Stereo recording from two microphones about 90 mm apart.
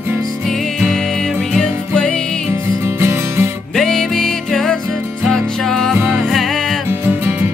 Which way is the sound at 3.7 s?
5° left (ahead or behind).